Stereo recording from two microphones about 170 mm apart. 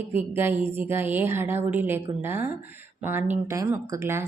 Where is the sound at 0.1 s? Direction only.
10° right (ahead or behind).